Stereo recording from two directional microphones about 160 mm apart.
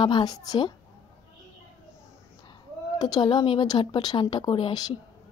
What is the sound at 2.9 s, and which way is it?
Speech, 25° left (ahead or behind).